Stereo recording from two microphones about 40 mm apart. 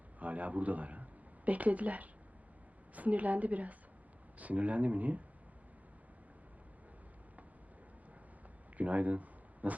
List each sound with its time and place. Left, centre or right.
0.2 s a man's voice: right
8.8 s speech: right